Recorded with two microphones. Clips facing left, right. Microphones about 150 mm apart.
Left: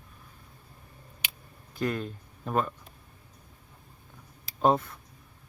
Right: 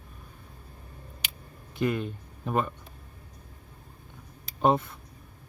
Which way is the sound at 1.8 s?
Centre (ahead or behind).